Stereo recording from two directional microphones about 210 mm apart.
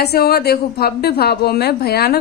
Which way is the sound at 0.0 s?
50° left (ahead or behind).